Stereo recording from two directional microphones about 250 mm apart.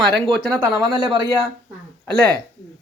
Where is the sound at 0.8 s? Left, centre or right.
Centre.